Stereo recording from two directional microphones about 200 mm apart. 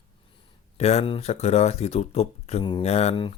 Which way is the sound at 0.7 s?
35° left (ahead or behind).